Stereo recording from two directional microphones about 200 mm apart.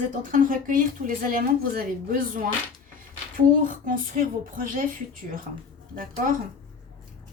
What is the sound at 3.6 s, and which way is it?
A woman's voice, 45° right (ahead or behind).